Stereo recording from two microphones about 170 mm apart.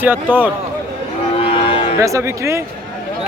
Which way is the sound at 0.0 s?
10° right (ahead or behind).